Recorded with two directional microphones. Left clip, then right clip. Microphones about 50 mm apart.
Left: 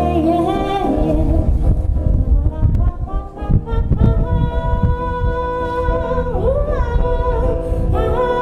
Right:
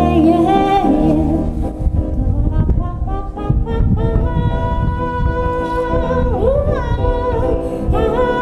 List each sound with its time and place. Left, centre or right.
0.0 s music: right
5.0 s music: right